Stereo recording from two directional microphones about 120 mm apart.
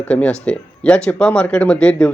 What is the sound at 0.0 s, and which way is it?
Speech, 10° left (ahead or behind).